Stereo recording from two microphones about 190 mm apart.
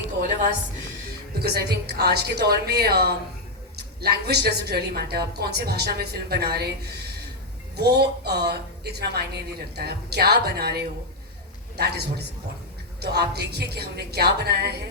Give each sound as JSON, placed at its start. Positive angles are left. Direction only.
{"t": 1.3, "sound": "a woman's voice", "side_deg": -55}